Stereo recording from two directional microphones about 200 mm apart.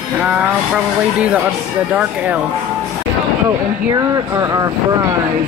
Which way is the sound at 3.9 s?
15° right (ahead or behind).